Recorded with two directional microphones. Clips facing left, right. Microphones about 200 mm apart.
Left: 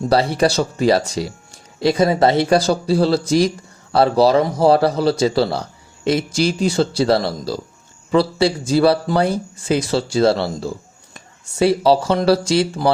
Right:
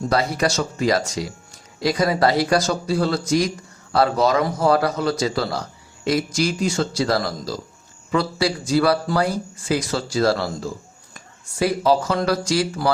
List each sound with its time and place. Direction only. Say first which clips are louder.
0.1 s speech: left 5 dB; 30° left (ahead or behind)